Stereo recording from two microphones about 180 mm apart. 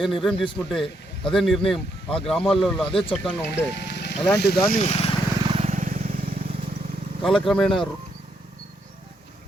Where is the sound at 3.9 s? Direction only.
70° left (ahead or behind).